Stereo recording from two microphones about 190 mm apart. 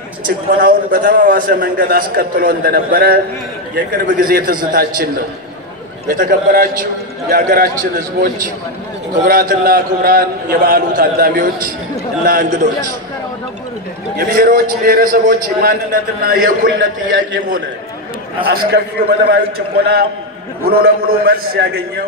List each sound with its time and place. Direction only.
0.6 s a man's voice: 45° right (ahead or behind)
14.1 s a man's voice: 50° right (ahead or behind); by 17.4 s 70° right (ahead or behind)
18.4 s a man's voice: 55° right (ahead or behind)
20.6 s a man's voice: 55° right (ahead or behind)